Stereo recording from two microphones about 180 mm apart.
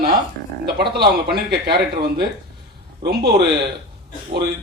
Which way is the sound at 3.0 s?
60° right (ahead or behind).